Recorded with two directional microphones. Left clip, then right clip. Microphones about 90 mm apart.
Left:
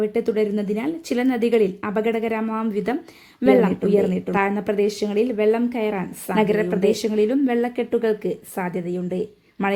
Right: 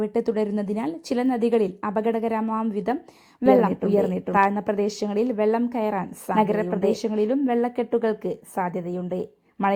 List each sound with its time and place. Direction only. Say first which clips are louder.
0.0 s a woman's voice: left 3 dB; 45° right (ahead or behind); by 9.0 s 30° right (ahead or behind)